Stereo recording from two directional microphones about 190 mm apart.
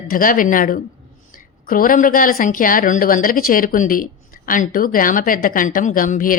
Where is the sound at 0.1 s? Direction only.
45° left (ahead or behind).